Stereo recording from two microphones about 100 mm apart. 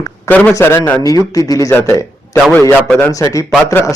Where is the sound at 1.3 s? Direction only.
35° left (ahead or behind).